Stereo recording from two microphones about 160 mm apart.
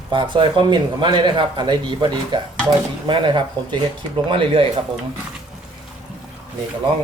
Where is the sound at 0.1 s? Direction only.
30° right (ahead or behind).